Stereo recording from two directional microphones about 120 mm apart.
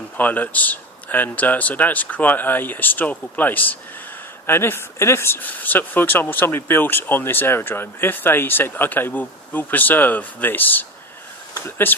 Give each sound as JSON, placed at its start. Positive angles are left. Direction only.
{"t": 0.2, "sound": "speech", "side_deg": 15}